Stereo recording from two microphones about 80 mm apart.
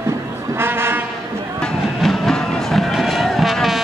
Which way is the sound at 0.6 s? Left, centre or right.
Right.